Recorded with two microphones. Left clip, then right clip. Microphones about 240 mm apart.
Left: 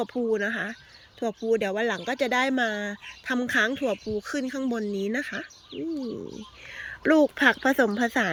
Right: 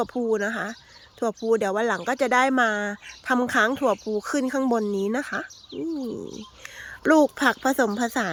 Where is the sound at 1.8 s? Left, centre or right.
Right.